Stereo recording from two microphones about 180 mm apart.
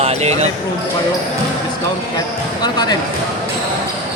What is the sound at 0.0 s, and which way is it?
Speech, 35° right (ahead or behind).